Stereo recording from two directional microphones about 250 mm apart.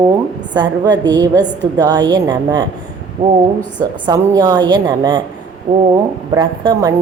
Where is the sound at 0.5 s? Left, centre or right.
Centre.